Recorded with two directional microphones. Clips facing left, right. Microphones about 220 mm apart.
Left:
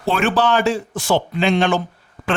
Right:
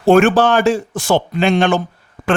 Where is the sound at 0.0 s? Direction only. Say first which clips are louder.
Right 8 dB; 45° right (ahead or behind).